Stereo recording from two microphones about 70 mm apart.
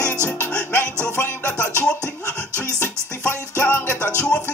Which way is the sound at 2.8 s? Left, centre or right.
Left.